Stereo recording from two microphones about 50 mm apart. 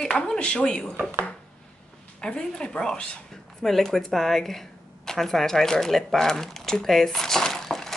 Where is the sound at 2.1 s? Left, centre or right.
Centre.